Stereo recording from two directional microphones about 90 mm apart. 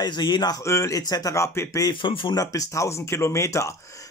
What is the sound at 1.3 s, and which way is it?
Speech, 30° left (ahead or behind).